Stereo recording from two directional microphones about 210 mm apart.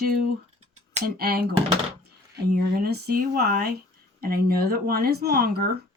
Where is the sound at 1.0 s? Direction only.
45° right (ahead or behind).